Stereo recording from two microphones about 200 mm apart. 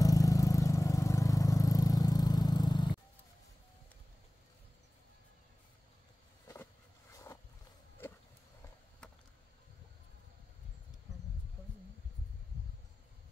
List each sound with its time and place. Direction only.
0.0 s vehicle: 15° left (ahead or behind)
6.4 s vehicle: 15° left (ahead or behind)
9.0 s a sound: 5° left (ahead or behind)